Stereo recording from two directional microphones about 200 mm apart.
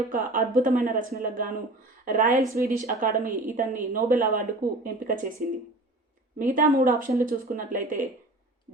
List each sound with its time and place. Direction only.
0.1 s a woman's voice: 45° right (ahead or behind)
2.3 s speech: 15° right (ahead or behind)
2.7 s a woman's voice: 40° right (ahead or behind)
6.4 s a woman's voice: 40° right (ahead or behind)